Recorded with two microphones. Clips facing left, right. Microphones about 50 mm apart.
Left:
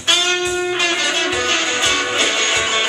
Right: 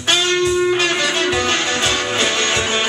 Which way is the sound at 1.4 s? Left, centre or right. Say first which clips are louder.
Even; left.